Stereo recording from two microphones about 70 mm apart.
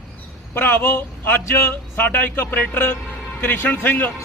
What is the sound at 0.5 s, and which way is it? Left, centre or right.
A man's voice, left.